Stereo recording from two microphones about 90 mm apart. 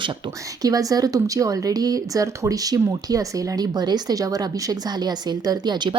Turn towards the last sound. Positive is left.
turn(degrees=-55)  # may be behind; listen again after turning